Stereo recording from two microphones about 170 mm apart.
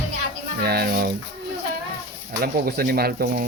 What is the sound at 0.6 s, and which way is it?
Speech, 65° right (ahead or behind).